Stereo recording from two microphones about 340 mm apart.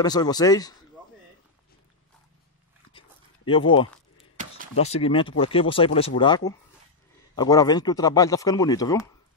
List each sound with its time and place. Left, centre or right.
0.0 s speech: centre
2.9 s dog: centre
4.7 s speech: centre